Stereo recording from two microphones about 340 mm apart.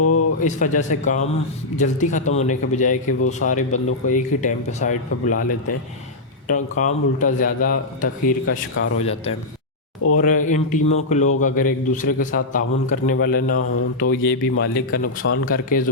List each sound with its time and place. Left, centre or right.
0.0 s a sound: left
0.4 s a man's voice: left
6.5 s a man's voice: left
9.0 s a man's voice: centre; by 15.4 s left
15.4 s a man's voice: left